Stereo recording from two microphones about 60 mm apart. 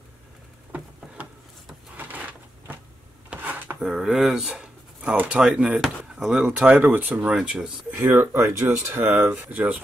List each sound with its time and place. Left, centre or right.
0.7 s a sound: right
3.8 s speech: centre
4.5 s a sound: centre
5.3 s speech: centre
6.1 s speech: centre
6.5 s speech: centre
6.8 s speech: right
7.2 s speech: centre
7.9 s speech: right